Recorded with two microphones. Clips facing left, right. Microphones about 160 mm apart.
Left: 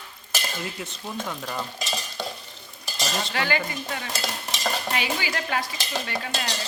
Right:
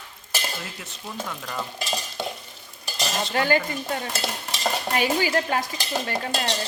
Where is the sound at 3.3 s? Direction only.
45° right (ahead or behind).